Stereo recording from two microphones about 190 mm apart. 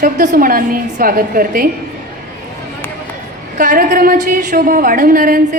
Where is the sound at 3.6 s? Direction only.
45° right (ahead or behind).